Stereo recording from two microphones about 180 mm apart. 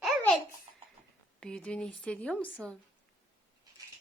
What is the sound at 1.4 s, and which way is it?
Speech, 5° left (ahead or behind).